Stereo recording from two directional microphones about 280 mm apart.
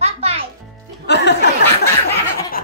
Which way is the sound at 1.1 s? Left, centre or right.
Left.